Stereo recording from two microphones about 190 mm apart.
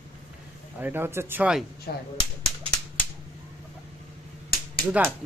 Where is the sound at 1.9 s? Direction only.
55° left (ahead or behind).